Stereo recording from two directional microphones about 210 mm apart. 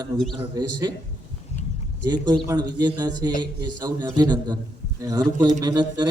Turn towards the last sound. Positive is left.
turn(degrees=-20)  # may be behind; listen again after turning